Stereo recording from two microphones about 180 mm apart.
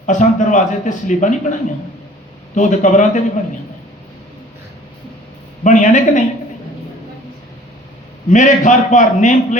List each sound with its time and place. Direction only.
0.0 s a man's voice: 40° left (ahead or behind)
2.6 s a man's voice: 45° left (ahead or behind)
5.6 s speech: 45° left (ahead or behind)
8.3 s a man's voice: 40° left (ahead or behind)